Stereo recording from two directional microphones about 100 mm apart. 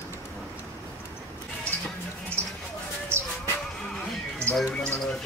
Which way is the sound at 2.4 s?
25° right (ahead or behind).